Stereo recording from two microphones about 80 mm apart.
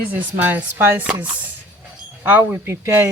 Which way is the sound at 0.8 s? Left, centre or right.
Right.